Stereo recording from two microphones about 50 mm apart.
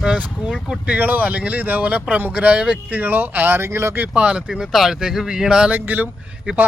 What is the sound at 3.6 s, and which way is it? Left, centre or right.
Speech, right.